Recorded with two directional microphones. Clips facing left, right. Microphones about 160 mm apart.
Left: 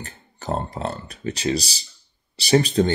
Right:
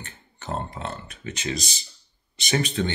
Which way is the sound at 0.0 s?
35° left (ahead or behind).